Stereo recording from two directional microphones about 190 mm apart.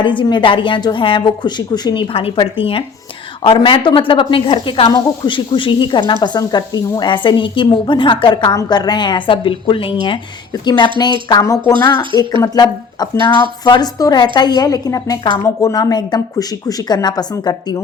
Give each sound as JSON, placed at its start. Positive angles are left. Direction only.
{"t": 0.0, "sound": "speech", "side_deg": 25}